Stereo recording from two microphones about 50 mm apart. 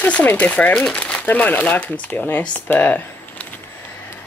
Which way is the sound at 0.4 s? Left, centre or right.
Left.